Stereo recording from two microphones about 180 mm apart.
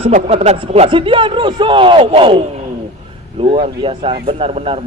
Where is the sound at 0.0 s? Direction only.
35° right (ahead or behind).